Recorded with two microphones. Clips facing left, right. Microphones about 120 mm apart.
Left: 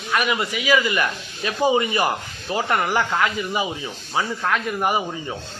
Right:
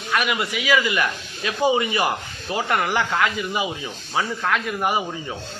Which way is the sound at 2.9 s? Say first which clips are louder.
Left 1 dB; 10° left (ahead or behind).